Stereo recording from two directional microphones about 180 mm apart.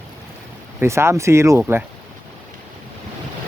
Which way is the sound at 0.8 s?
15° right (ahead or behind).